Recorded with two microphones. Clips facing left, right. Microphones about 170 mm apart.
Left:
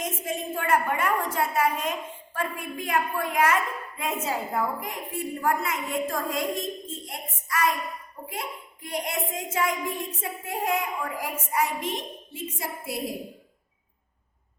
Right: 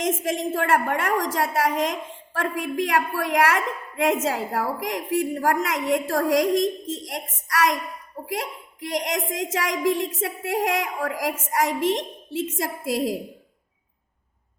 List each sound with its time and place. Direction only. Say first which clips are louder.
0.0 s a woman's voice: right 7 dB; 90° right